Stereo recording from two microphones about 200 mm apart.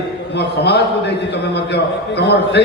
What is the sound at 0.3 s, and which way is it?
A man's voice, 55° left (ahead or behind).